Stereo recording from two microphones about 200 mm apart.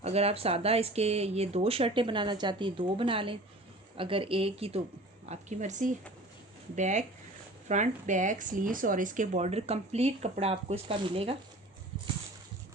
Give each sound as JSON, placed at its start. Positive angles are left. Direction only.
{"t": 0.0, "sound": "speech", "side_deg": -30}